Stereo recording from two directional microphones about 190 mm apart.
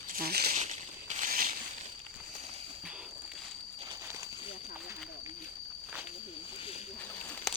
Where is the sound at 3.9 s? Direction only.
15° right (ahead or behind).